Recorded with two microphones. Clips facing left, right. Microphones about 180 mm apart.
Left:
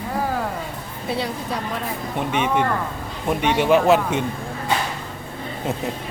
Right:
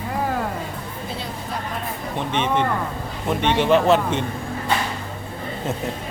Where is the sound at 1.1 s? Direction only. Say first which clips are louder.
Left 7 dB; 70° left (ahead or behind).